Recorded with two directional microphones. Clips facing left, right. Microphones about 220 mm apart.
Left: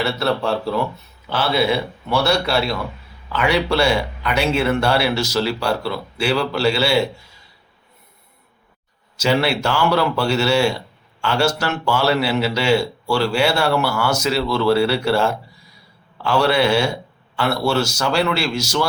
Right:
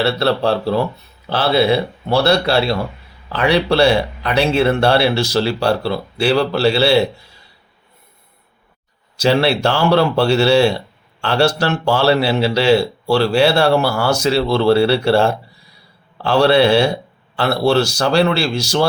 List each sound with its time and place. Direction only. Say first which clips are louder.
0.0 s speech: right 4 dB; 35° right (ahead or behind)
9.1 s speech: right 4 dB; 35° right (ahead or behind)